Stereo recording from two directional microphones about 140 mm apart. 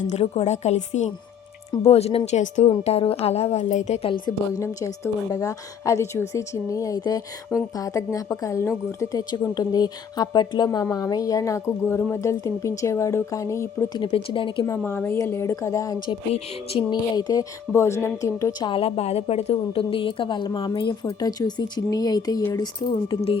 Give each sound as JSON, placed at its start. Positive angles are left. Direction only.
{"t": 0.1, "sound": "a woman's voice", "side_deg": 50}
{"t": 4.3, "sound": "speech", "side_deg": 25}
{"t": 14.0, "sound": "a woman's voice", "side_deg": 40}
{"t": 14.8, "sound": "speech", "side_deg": 15}
{"t": 16.3, "sound": "a woman's voice", "side_deg": 45}
{"t": 16.9, "sound": "speech", "side_deg": 30}
{"t": 18.7, "sound": "a woman's voice", "side_deg": 40}